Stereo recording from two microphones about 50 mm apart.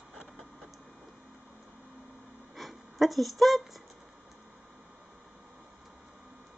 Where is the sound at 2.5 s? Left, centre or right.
Centre.